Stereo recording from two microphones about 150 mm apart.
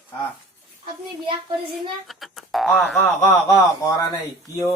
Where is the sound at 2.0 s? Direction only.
Centre (ahead or behind).